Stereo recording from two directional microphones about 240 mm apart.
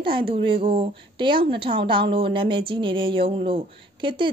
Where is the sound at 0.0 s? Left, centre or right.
Right.